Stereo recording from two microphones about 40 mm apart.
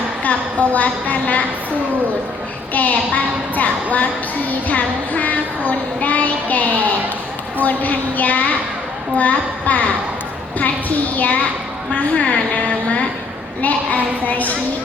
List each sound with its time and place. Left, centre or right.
0.7 s a woman's voice: left
2.7 s a woman's voice: left
13.6 s a woman's voice: left